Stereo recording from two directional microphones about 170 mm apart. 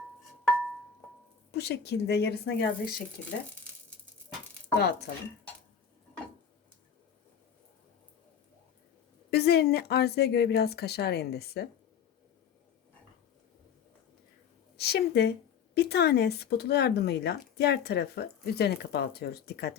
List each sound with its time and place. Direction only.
1.5 s speech: 75° left (ahead or behind)
3.5 s a sound: 10° left (ahead or behind)
4.7 s speech: 75° left (ahead or behind)
9.3 s speech: 70° left (ahead or behind)
14.8 s a woman's voice: 75° left (ahead or behind)